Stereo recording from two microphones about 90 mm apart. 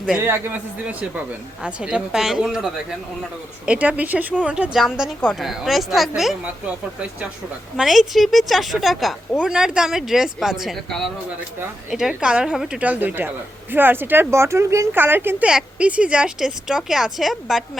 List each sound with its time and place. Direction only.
1.6 s speech: 10° right (ahead or behind)
3.7 s speech: 15° right (ahead or behind)
6.4 s speech: 15° right (ahead or behind)
7.8 s speech: centre (ahead or behind)
12.8 s speech: 20° right (ahead or behind)
15.4 s speech: 10° right (ahead or behind)